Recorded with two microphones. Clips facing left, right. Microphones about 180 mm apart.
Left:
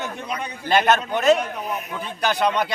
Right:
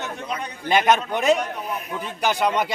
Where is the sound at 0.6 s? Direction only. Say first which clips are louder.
Even; 15° right (ahead or behind).